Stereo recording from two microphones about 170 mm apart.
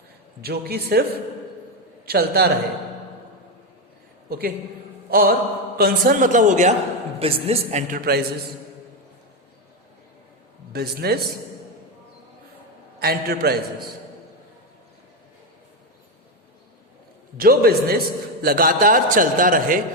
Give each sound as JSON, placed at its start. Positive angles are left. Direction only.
{"t": 0.4, "sound": "a man's voice", "side_deg": -65}
{"t": 2.0, "sound": "speech", "side_deg": -70}
{"t": 4.3, "sound": "a man's voice", "side_deg": -65}
{"t": 7.2, "sound": "speech", "side_deg": -35}
{"t": 10.7, "sound": "speech", "side_deg": -65}
{"t": 13.0, "sound": "a man's voice", "side_deg": -65}
{"t": 17.3, "sound": "a man's voice", "side_deg": -60}